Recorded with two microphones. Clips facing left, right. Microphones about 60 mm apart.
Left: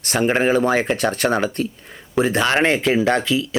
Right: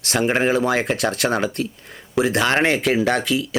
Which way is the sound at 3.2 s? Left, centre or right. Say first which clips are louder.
Left 1 dB; right.